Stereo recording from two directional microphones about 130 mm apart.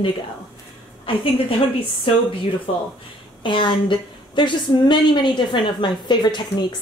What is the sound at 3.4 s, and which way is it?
A woman's voice, 40° left (ahead or behind).